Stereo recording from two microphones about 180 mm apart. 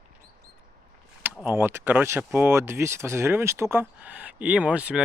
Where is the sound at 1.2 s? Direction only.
10° right (ahead or behind).